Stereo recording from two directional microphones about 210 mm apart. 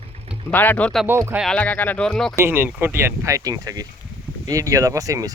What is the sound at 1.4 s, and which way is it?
Speech, 5° left (ahead or behind).